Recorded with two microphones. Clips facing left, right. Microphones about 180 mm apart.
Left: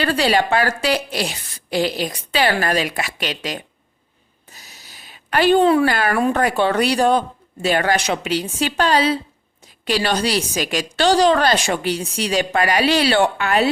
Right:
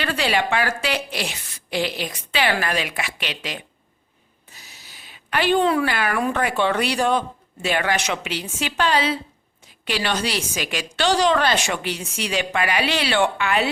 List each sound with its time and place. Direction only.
0.0 s a woman's voice: 35° left (ahead or behind)